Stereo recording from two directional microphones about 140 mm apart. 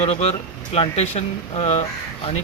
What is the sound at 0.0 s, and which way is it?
Speech, 45° left (ahead or behind).